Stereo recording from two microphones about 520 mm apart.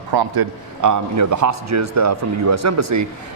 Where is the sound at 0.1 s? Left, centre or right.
Right.